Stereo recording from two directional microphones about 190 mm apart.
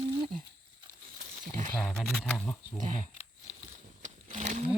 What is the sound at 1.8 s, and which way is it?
Speech, centre (ahead or behind).